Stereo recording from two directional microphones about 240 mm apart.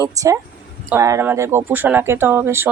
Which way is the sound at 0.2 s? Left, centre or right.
Centre.